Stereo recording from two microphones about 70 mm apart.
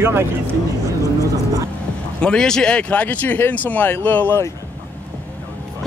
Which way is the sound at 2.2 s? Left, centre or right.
Centre.